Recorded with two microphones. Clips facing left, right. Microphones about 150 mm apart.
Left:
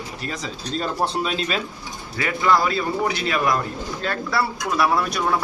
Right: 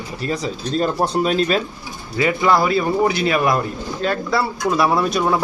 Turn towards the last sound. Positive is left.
turn(degrees=-25)  # may be behind; listen again after turning